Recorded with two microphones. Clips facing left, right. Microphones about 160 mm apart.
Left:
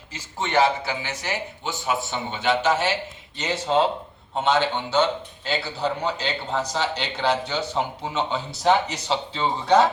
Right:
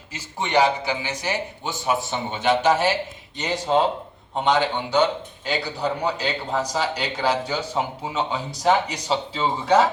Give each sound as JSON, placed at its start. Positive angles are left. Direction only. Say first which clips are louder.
{"t": 0.1, "sound": "speech", "louder": "right 2 dB", "side_deg": -10}